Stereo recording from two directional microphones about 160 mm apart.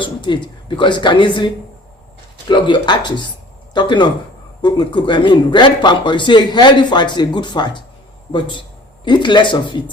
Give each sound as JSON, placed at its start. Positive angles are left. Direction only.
{"t": 0.0, "sound": "speech", "side_deg": 30}
{"t": 2.5, "sound": "a man's voice", "side_deg": 30}